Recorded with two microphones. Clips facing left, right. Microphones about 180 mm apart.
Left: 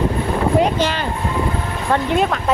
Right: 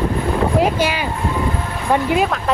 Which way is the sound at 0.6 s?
10° right (ahead or behind).